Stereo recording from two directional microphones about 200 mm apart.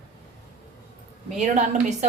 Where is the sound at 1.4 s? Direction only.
35° right (ahead or behind).